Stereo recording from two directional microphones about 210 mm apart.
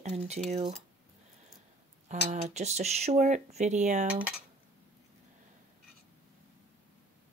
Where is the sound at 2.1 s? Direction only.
30° right (ahead or behind).